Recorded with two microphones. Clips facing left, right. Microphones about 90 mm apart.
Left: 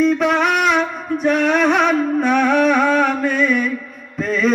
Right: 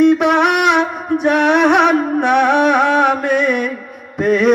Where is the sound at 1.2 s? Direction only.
65° right (ahead or behind).